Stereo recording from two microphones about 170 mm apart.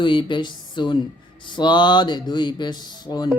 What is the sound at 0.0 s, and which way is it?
Speech, 30° left (ahead or behind).